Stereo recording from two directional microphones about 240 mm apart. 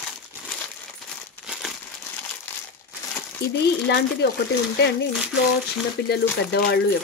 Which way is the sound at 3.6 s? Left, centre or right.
Left.